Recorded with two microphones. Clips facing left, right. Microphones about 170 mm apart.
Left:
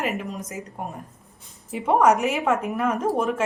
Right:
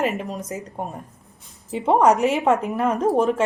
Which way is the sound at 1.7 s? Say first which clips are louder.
Right 2 dB; 30° right (ahead or behind).